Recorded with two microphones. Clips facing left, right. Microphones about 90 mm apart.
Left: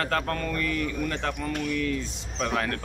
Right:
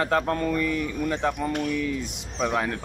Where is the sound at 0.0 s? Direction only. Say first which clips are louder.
Right 4 dB; 20° right (ahead or behind).